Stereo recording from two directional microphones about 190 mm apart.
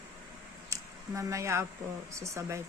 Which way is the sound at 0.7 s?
15° right (ahead or behind).